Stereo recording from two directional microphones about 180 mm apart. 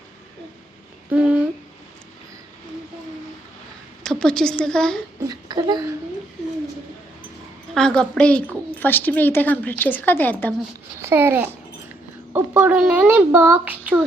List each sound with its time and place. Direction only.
1.1 s humming: 10° right (ahead or behind)
4.0 s a woman's voice: 5° left (ahead or behind)
5.2 s speech: 20° right (ahead or behind)
7.7 s a woman's voice: 5° left (ahead or behind)
11.0 s babbling: 15° right (ahead or behind)
12.3 s a woman's voice: 10° right (ahead or behind)